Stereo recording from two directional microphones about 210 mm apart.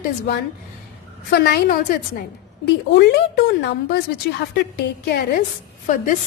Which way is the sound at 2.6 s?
55° left (ahead or behind).